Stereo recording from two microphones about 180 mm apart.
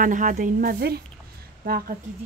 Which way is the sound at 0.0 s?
45° right (ahead or behind).